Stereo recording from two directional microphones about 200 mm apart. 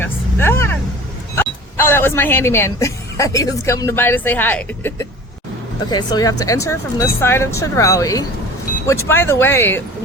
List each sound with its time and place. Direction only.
0.0 s vehicle: 10° left (ahead or behind)
1.4 s speech: 10° left (ahead or behind)